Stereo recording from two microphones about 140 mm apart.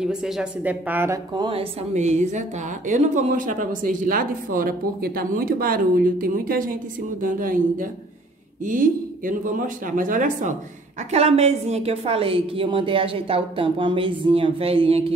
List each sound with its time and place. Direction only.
0.0 s speech: 5° right (ahead or behind)
1.3 s speech: 35° right (ahead or behind); by 10.5 s 70° right (ahead or behind)
11.1 s a woman's voice: 50° right (ahead or behind)